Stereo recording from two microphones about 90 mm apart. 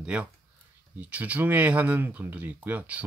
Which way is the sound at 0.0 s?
10° right (ahead or behind).